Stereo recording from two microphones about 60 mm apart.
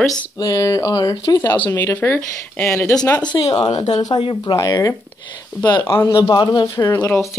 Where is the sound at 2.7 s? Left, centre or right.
Left.